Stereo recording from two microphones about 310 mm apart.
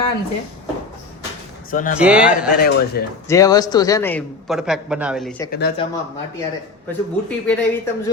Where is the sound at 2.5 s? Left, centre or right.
Left.